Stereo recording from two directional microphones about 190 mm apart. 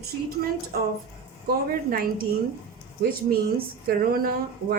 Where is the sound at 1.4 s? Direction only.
50° right (ahead or behind).